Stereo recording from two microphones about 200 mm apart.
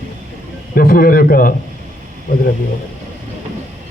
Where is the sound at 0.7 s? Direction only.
45° left (ahead or behind).